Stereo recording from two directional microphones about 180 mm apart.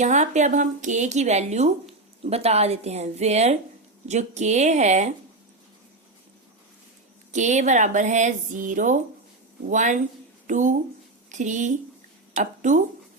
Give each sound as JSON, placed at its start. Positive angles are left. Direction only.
{"t": 0.0, "sound": "a woman's voice", "side_deg": -40}
{"t": 7.3, "sound": "speech", "side_deg": -40}